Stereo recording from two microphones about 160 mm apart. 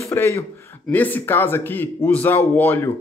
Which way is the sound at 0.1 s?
15° left (ahead or behind).